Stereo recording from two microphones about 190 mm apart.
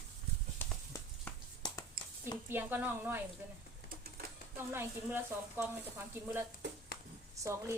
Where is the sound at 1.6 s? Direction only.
20° left (ahead or behind).